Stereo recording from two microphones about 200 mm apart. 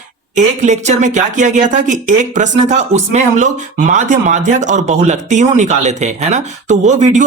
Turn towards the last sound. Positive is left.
turn(degrees=-35)  # may be behind; listen again after turning